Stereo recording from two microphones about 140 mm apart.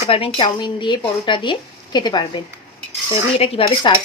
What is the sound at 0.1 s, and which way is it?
Speech, 40° left (ahead or behind).